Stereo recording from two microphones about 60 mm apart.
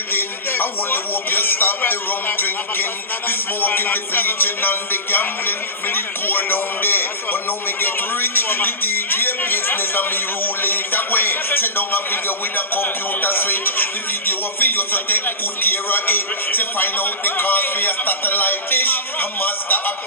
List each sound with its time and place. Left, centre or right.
0.1 s speech: left